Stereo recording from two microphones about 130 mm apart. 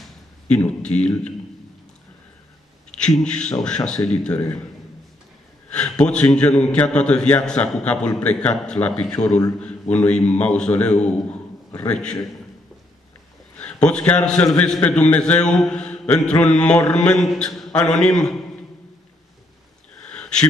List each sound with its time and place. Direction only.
0.5 s a man's voice: 10° left (ahead or behind)
2.9 s a man's voice: 5° left (ahead or behind)
5.7 s a man's voice: 5° left (ahead or behind)
13.6 s a man's voice: 10° left (ahead or behind)
20.1 s a sound: 5° left (ahead or behind)